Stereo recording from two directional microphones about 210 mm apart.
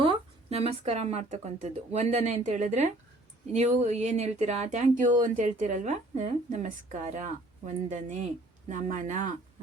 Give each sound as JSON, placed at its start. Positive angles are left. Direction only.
{"t": 0.0, "sound": "speech", "side_deg": -25}